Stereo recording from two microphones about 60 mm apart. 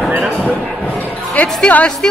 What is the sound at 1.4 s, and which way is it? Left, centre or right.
Speech, left.